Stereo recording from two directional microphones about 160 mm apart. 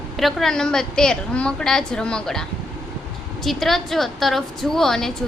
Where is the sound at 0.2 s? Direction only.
Centre (ahead or behind).